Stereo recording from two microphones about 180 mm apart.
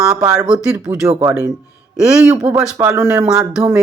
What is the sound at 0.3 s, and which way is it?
Speech, 5° right (ahead or behind).